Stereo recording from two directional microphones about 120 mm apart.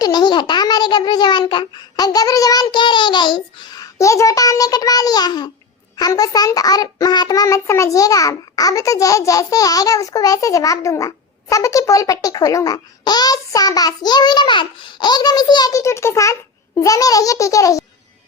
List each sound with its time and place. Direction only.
0.0 s a child's voice: 35° left (ahead or behind)